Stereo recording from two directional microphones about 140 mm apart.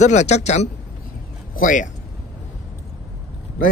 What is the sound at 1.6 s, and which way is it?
Speech, 70° left (ahead or behind).